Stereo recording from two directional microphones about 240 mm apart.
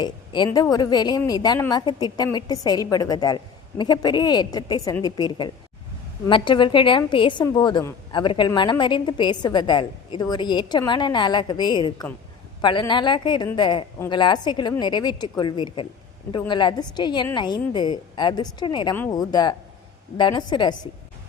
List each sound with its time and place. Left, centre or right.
0.0 s a woman's voice: centre